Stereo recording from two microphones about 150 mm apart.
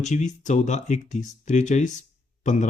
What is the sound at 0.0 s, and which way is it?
Speech, 55° left (ahead or behind).